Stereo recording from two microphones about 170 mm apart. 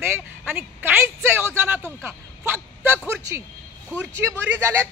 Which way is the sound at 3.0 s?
15° right (ahead or behind).